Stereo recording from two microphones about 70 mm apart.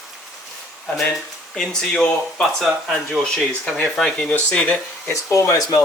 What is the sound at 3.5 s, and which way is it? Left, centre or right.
Speech, centre.